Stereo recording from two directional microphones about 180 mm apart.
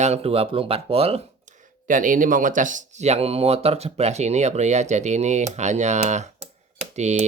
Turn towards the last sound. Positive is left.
turn(degrees=-40)  # may be behind; listen again after turning